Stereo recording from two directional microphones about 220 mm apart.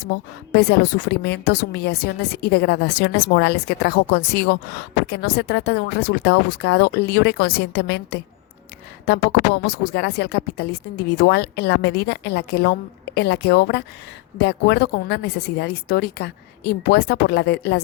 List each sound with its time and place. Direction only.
0.5 s speech: 50° left (ahead or behind)